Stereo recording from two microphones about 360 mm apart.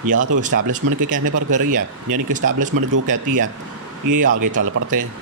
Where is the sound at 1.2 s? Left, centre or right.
Right.